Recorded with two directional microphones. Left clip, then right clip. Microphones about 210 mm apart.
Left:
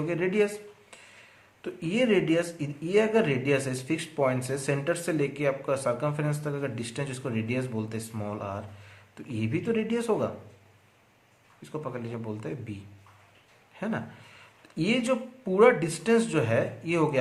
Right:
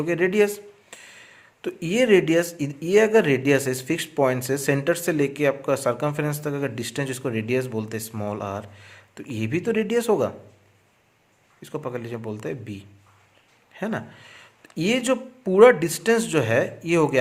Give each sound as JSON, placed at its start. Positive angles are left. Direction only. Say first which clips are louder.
{"t": 0.0, "sound": "speech", "louder": "right 6 dB", "side_deg": -40}
{"t": 11.6, "sound": "speech", "louder": "right 5 dB", "side_deg": -40}